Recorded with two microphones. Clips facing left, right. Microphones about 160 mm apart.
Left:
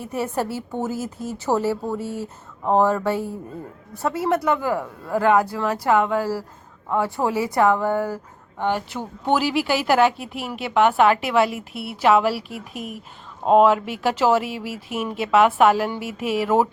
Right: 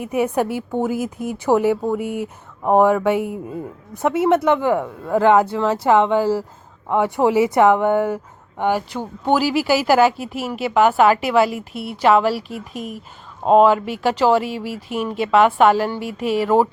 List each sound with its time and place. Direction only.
0.0 s a woman's voice: 15° right (ahead or behind)
9.3 s a woman's voice: centre (ahead or behind)